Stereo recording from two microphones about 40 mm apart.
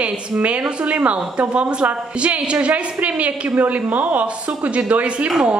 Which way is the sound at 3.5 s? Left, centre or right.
Right.